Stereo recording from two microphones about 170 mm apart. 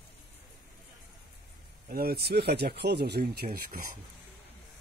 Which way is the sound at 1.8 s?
65° right (ahead or behind).